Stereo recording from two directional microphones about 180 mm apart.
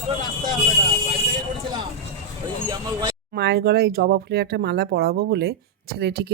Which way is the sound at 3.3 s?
65° right (ahead or behind).